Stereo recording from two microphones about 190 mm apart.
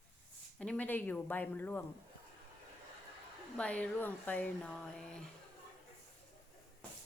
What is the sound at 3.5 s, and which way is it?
Speech, 5° left (ahead or behind).